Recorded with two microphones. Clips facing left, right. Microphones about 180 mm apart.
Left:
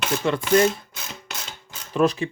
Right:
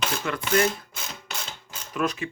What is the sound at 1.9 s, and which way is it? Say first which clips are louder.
Speech: left 7 dB; 30° left (ahead or behind).